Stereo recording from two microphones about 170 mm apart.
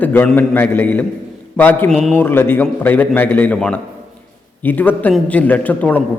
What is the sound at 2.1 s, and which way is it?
A man's voice, 15° left (ahead or behind).